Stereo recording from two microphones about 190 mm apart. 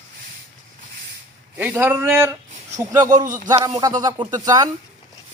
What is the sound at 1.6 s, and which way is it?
Speech, 10° right (ahead or behind).